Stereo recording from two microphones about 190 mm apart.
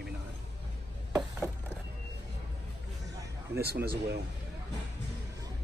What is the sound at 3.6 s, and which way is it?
Speech, 55° right (ahead or behind).